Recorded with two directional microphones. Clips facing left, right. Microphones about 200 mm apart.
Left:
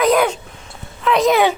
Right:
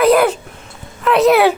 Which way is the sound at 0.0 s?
5° right (ahead or behind).